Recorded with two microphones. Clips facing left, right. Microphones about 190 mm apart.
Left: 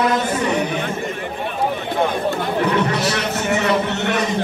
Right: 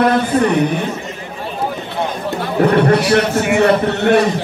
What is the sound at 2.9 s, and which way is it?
Speech, 55° right (ahead or behind).